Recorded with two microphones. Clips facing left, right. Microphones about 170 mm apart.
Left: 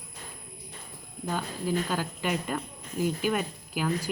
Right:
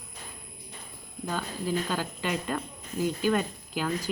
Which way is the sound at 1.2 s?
10° left (ahead or behind).